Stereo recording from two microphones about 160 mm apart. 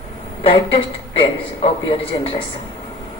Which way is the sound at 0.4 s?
35° left (ahead or behind).